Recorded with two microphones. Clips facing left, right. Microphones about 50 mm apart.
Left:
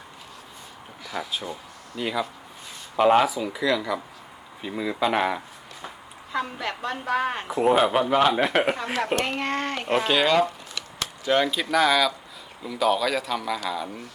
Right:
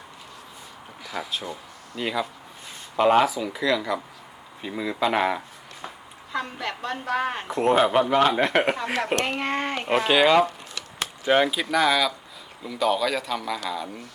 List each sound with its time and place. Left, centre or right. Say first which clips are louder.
1.0 s speech: even; centre
11.0 s a sound: right 2 dB; centre
11.5 s speech: left 1 dB; centre